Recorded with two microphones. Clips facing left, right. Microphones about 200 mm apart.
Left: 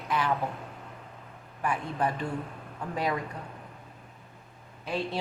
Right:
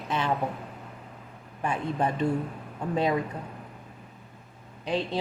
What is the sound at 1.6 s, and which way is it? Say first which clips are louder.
Speech: right 2 dB; 25° right (ahead or behind).